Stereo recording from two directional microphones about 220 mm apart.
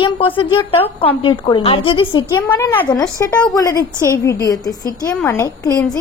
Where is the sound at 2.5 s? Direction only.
10° left (ahead or behind).